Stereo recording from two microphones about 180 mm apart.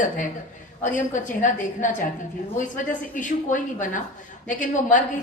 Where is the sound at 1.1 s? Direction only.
45° left (ahead or behind).